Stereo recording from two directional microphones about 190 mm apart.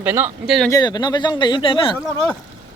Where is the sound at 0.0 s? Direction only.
10° right (ahead or behind).